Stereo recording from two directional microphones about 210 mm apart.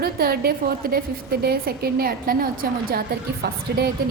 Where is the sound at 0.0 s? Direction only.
45° right (ahead or behind).